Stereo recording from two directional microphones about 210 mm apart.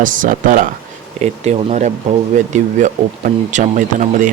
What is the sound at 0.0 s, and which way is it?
Speech, 40° right (ahead or behind).